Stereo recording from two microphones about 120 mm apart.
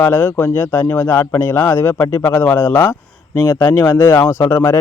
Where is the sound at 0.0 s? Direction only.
20° left (ahead or behind).